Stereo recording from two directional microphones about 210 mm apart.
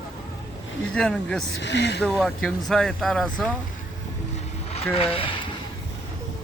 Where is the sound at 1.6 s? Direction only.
55° left (ahead or behind).